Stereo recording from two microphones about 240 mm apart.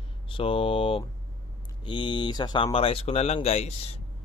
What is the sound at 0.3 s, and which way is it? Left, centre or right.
Speech, left.